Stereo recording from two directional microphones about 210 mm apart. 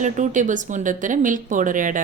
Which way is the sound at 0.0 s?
35° right (ahead or behind).